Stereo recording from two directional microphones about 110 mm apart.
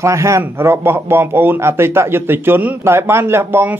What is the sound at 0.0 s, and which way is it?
A man's voice, 25° right (ahead or behind).